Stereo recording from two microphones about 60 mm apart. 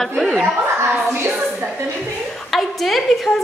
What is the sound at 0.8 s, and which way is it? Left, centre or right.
Speech, right.